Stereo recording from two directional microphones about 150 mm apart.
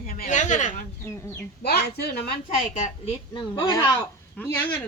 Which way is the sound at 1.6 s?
90° left.